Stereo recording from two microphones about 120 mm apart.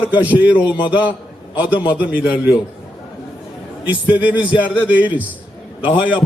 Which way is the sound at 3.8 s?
15° right (ahead or behind).